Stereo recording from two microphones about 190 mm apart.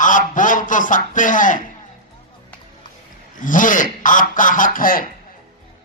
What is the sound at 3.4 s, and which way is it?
Speech, 45° left (ahead or behind).